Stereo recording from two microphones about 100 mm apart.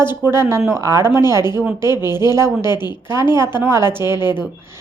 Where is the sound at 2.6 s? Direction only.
45° left (ahead or behind).